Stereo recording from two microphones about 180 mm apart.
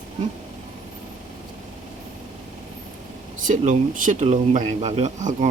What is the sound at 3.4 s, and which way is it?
Speech, 45° right (ahead or behind).